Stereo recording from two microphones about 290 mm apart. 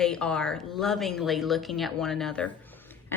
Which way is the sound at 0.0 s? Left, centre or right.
Centre.